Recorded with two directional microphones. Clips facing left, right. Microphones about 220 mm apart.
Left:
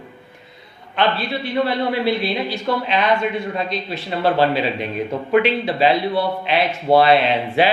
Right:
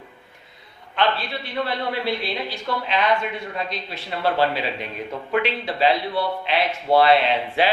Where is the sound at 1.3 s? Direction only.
5° left (ahead or behind).